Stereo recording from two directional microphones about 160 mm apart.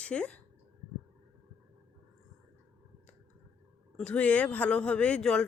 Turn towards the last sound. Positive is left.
turn(degrees=5)  # may be behind; listen again after turning